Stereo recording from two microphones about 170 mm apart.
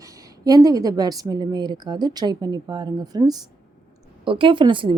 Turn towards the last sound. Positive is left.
turn(degrees=-30)  # may be behind; listen again after turning